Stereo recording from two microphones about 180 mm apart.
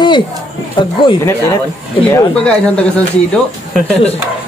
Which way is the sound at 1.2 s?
15° left (ahead or behind).